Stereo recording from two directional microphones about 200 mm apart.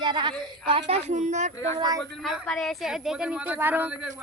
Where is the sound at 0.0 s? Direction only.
20° right (ahead or behind).